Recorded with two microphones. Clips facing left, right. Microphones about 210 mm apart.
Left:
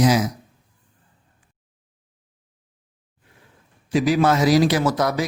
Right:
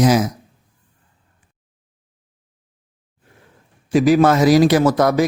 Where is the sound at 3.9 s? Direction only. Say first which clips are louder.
Right 5 dB; 50° right (ahead or behind).